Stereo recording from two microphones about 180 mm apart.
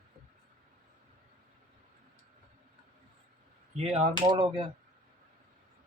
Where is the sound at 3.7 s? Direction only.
35° right (ahead or behind).